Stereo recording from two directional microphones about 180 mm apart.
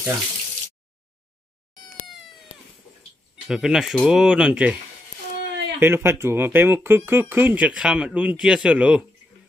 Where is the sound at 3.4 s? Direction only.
Centre (ahead or behind).